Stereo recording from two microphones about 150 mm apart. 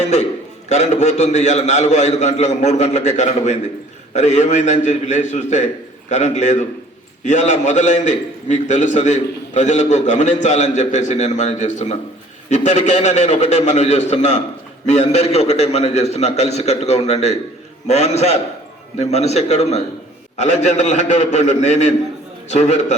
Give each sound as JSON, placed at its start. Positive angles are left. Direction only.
{"t": 0.7, "sound": "a man's voice", "side_deg": 50}